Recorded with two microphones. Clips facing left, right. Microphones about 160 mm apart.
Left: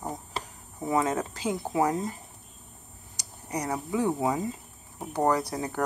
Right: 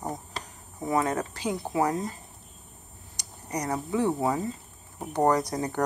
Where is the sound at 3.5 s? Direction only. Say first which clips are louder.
Right 1 dB; 10° left (ahead or behind).